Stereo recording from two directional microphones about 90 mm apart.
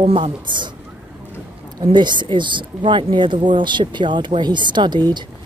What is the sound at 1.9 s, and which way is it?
Speech, 60° right (ahead or behind).